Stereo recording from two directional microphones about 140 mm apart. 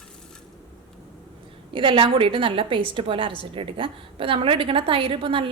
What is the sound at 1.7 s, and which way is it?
A woman's voice, 40° right (ahead or behind).